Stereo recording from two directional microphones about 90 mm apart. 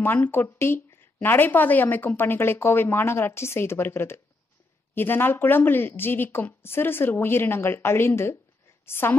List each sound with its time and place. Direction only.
0.0 s a woman's voice: 25° left (ahead or behind)